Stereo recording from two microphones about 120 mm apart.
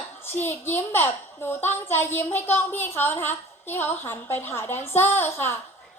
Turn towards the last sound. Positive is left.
turn(degrees=20)  # may be behind; listen again after turning